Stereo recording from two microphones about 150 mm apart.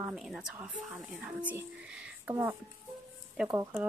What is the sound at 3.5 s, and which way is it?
Speech, 20° right (ahead or behind).